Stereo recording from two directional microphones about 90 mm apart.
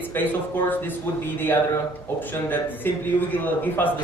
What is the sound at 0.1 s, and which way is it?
A man's voice, 20° left (ahead or behind).